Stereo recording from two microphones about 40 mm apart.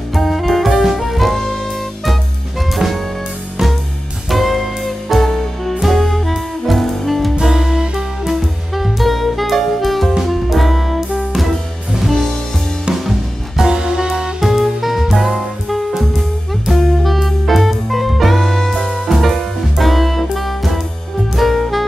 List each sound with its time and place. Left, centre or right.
0.1 s music: centre
2.7 s music: centre
4.3 s music: centre
7.4 s music: centre
8.3 s music: centre
13.7 s music: centre
14.4 s music: centre